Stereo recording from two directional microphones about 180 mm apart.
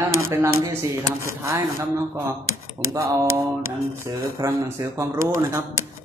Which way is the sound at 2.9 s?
15° right (ahead or behind).